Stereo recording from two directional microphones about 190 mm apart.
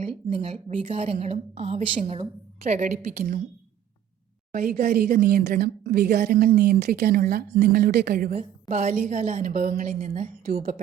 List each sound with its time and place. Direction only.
0.3 s a woman's voice: 35° right (ahead or behind)
4.5 s a woman's voice: 50° right (ahead or behind)